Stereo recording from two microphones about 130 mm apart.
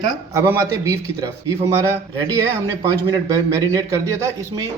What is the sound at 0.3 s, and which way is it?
A man's voice, 25° right (ahead or behind).